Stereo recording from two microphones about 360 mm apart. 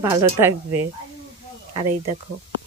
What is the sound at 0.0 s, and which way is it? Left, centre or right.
Speech, centre.